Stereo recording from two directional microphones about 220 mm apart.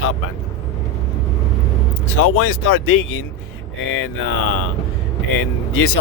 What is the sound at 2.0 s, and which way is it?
Speech, 70° left (ahead or behind).